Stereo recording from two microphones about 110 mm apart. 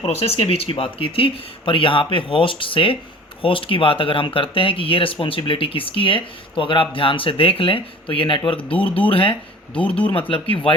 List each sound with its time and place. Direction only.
0.0 s speech: 65° left (ahead or behind); by 8.6 s 50° left (ahead or behind)
8.7 s speech: 15° left (ahead or behind)
9.0 s speech: 55° left (ahead or behind)
9.7 s speech: 10° left (ahead or behind)
10.1 s speech: 55° left (ahead or behind)